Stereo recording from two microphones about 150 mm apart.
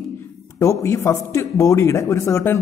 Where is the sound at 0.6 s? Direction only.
20° left (ahead or behind).